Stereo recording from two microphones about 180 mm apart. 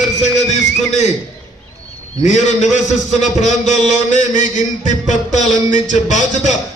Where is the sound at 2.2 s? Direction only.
40° left (ahead or behind).